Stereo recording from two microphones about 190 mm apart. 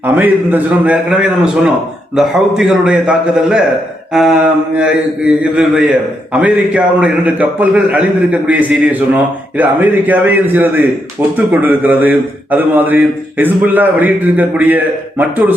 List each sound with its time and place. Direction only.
0.2 s a man's voice: 10° right (ahead or behind)